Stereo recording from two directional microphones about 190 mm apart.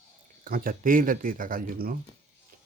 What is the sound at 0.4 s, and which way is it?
Speech, 50° right (ahead or behind).